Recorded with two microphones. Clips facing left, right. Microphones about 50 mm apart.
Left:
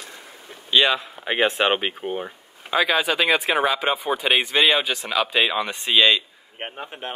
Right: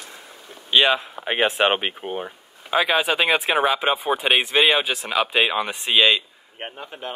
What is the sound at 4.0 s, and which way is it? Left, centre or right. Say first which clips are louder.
Speech: right 2 dB; right.